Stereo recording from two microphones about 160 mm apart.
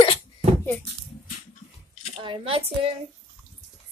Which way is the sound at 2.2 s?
35° right (ahead or behind).